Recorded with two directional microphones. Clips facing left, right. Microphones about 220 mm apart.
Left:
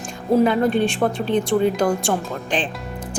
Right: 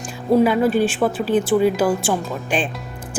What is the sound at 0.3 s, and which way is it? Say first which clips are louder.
A woman's voice: right 1 dB; 5° right (ahead or behind).